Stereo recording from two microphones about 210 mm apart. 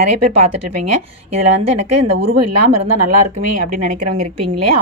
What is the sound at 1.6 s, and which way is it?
Speech, 30° right (ahead or behind).